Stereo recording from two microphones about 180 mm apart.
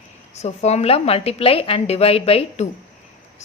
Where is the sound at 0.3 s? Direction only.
40° left (ahead or behind).